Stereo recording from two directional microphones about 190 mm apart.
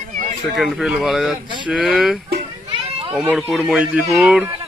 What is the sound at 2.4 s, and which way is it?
Children playing, 30° right (ahead or behind).